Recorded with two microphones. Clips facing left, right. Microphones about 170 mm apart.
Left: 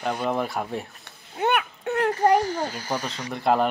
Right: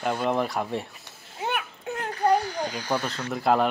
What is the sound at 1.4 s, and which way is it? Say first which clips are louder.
Children playing: left 7 dB; 65° left (ahead or behind).